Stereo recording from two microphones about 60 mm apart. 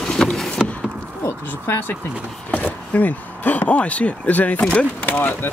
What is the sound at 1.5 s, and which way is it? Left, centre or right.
Speech, left.